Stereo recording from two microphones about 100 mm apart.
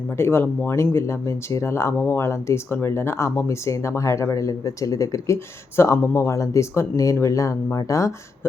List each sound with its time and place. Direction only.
0.2 s speech: 25° left (ahead or behind)